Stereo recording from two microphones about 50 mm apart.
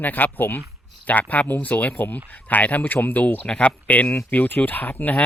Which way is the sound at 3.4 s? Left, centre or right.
Left.